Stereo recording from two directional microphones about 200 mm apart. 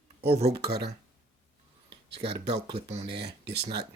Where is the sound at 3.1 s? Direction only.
55° right (ahead or behind).